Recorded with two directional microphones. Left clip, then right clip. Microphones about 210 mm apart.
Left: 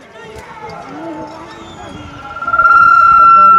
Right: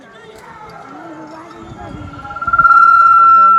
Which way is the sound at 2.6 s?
50° right (ahead or behind).